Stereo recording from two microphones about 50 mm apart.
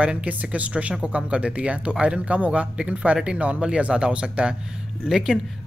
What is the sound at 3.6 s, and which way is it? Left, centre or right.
Speech, right.